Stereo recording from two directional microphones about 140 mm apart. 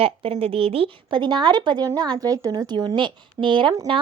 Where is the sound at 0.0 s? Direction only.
40° right (ahead or behind).